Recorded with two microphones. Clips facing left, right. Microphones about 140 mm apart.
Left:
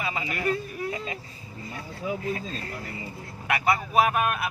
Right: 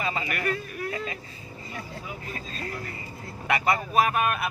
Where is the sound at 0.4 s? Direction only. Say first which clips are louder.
Left 2 dB; 25° left (ahead or behind).